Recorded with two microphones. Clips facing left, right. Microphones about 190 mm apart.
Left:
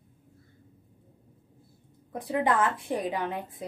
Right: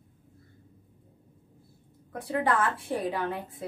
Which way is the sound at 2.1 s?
15° left (ahead or behind).